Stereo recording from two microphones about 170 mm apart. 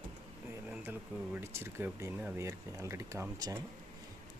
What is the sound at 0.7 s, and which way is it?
Speech, 10° right (ahead or behind).